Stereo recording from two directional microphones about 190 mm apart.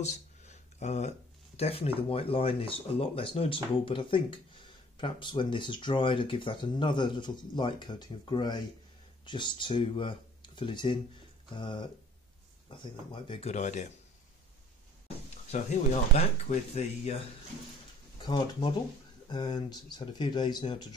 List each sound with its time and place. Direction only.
0.0 s a sound: 35° left (ahead or behind)
1.6 s speech: 30° left (ahead or behind)
16.2 s speech: 35° left (ahead or behind)
18.1 s speech: 25° left (ahead or behind)